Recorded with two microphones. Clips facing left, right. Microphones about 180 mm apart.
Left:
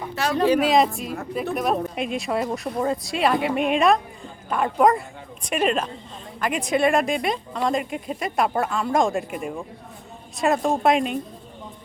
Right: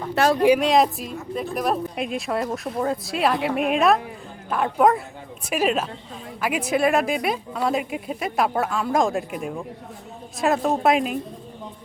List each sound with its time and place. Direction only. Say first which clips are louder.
0.2 s speech: right 7 dB; 65° right (ahead or behind)
0.6 s speech: even; centre (ahead or behind)